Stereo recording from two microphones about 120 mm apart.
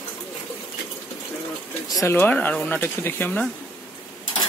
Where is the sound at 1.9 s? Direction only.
25° left (ahead or behind).